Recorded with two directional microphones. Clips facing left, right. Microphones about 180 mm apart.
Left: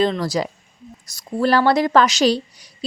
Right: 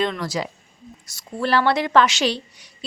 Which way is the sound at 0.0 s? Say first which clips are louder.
Left 5 dB; 35° left (ahead or behind).